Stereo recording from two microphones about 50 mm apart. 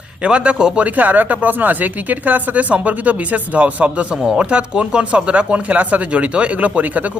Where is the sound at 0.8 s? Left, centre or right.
Right.